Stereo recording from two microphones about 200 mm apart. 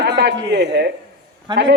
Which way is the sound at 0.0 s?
60° right (ahead or behind).